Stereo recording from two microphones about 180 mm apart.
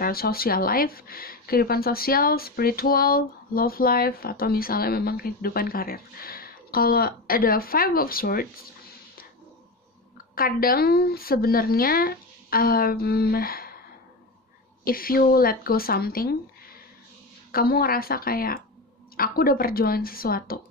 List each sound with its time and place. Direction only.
0.0 s speech: 55° left (ahead or behind)
10.3 s speech: 55° left (ahead or behind)
14.9 s speech: 55° left (ahead or behind)
17.5 s speech: 55° left (ahead or behind)